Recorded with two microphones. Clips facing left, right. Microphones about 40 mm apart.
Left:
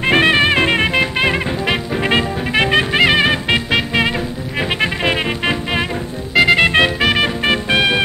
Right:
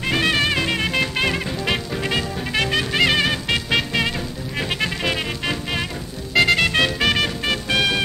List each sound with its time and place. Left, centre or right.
0.0 s music: left
6.3 s music: centre
6.6 s music: left
7.0 s music: centre